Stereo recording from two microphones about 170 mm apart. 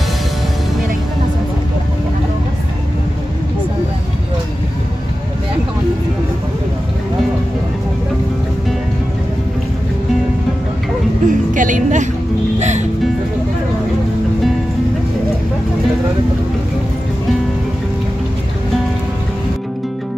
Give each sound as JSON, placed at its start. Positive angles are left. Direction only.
{"t": 11.2, "sound": "music", "side_deg": -50}